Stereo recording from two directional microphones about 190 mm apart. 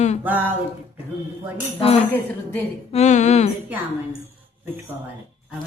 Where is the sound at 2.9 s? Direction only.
35° left (ahead or behind).